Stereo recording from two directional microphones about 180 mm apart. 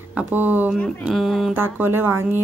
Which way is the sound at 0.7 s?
10° left (ahead or behind).